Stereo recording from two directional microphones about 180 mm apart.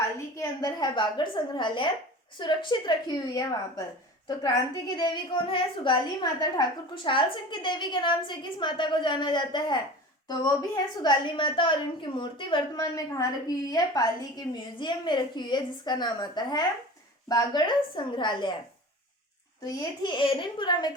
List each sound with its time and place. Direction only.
0.2 s a woman's voice: 20° left (ahead or behind)
19.6 s a woman's voice: 20° left (ahead or behind)